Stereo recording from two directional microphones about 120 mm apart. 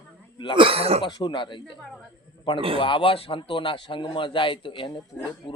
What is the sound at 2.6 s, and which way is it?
Speech, 50° right (ahead or behind).